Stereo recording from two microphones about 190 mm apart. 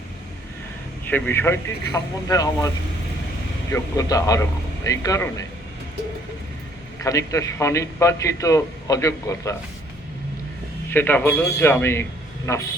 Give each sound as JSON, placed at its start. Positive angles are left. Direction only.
{"t": 1.0, "sound": "a man's voice", "side_deg": 10}
{"t": 3.7, "sound": "a man's voice", "side_deg": 20}
{"t": 7.0, "sound": "a man's voice", "side_deg": 15}
{"t": 10.9, "sound": "a man's voice", "side_deg": 10}